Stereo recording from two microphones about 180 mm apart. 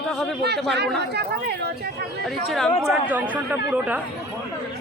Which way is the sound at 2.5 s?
Centre (ahead or behind).